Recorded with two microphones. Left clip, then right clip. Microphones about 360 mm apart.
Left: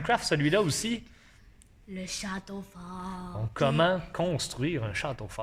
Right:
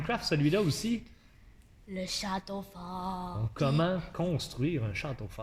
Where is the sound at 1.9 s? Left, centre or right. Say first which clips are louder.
Right 2 dB; centre.